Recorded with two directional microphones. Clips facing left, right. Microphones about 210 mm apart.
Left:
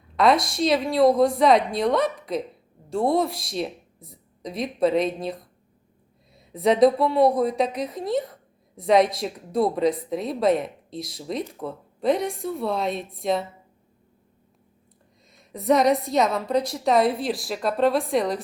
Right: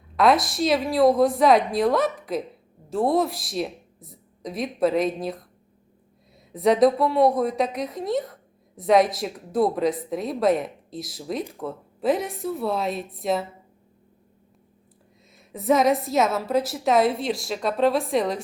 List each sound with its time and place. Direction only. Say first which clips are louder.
0.2 s a woman's voice: even; centre (ahead or behind)
6.5 s a woman's voice: even; centre (ahead or behind)
15.4 s a woman's voice: even; centre (ahead or behind)